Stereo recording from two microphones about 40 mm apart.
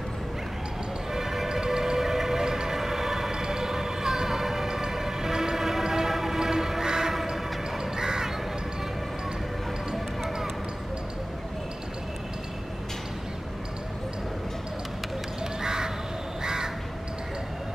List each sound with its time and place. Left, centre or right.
1.1 s music: centre
15.6 s crow: centre